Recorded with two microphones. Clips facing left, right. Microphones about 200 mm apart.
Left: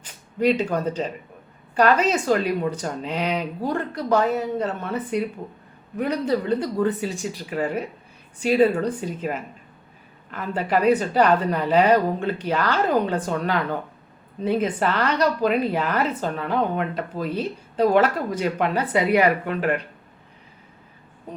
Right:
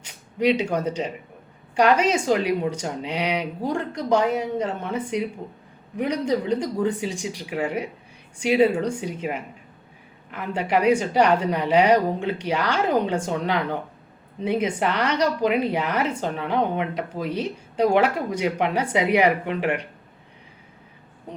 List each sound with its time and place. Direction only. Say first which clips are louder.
1.7 s a woman's voice: even; 15° right (ahead or behind)